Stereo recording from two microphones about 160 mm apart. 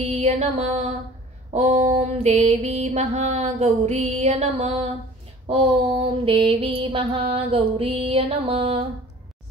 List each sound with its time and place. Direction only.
0.0 s mantra: 45° right (ahead or behind)